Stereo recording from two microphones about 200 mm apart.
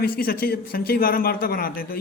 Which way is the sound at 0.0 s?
50° left (ahead or behind).